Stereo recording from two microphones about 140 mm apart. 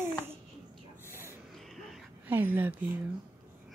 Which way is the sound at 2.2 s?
15° right (ahead or behind).